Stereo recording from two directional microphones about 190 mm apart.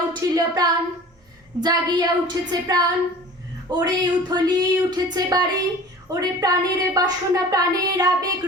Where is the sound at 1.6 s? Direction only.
20° right (ahead or behind).